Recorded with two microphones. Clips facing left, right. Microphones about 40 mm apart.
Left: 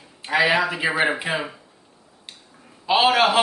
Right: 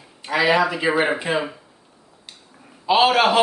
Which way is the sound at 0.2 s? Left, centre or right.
Centre.